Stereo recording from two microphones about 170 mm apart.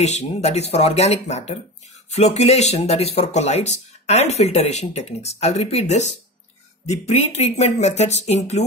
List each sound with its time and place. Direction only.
0.0 s speech: 40° left (ahead or behind)